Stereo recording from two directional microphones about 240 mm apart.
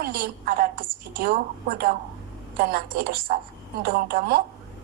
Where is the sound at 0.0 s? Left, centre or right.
Right.